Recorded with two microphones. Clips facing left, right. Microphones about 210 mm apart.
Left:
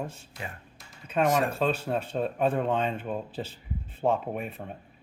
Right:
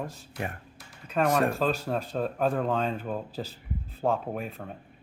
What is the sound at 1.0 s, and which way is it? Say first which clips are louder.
Speech: even; centre (ahead or behind).